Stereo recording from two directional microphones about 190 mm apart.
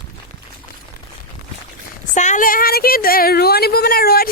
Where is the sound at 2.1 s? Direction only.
40° left (ahead or behind).